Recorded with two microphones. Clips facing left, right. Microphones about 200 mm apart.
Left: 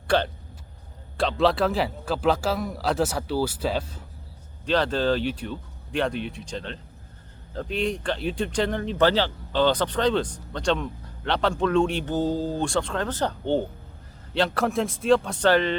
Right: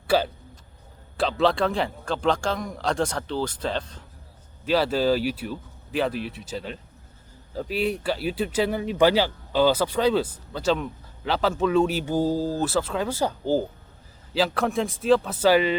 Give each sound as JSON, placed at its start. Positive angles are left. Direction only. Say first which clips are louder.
{"t": 0.1, "sound": "a man's voice", "louder": "right 1 dB", "side_deg": -5}
{"t": 4.6, "sound": "a man's voice", "louder": "right 1 dB", "side_deg": -5}